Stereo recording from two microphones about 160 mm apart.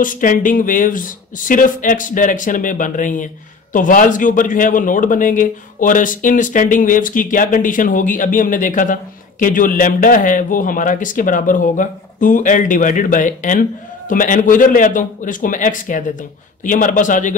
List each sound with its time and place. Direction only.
0.0 s a man's voice: 55° left (ahead or behind)